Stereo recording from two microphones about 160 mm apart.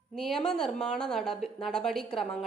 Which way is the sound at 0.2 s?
5° left (ahead or behind).